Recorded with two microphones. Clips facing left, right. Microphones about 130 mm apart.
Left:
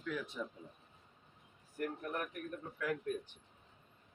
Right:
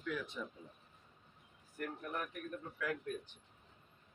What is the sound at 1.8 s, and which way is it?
Speech, 5° left (ahead or behind).